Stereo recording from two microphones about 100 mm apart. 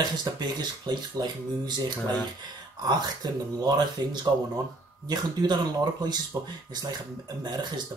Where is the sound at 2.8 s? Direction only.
40° right (ahead or behind).